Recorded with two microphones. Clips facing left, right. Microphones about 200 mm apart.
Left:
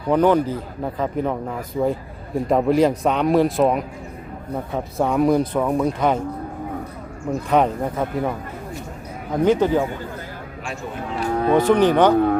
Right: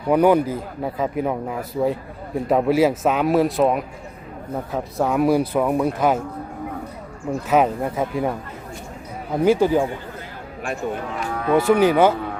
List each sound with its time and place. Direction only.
0.1 s a man's voice: 10° right (ahead or behind)
7.5 s a man's voice: 5° right (ahead or behind)
9.4 s a man's voice: 10° right (ahead or behind)
11.2 s music: 35° left (ahead or behind)
11.5 s a man's voice: 10° right (ahead or behind)
12.1 s speech: 55° left (ahead or behind)